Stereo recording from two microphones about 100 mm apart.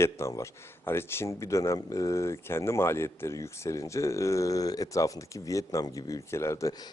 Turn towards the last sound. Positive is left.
turn(degrees=30)  # may be behind; listen again after turning